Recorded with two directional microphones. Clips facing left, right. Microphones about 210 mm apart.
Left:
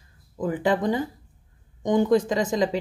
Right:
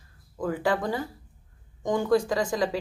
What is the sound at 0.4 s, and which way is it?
A woman's voice, 20° left (ahead or behind).